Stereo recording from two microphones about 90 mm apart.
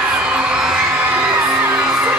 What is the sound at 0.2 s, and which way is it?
Music, 10° right (ahead or behind).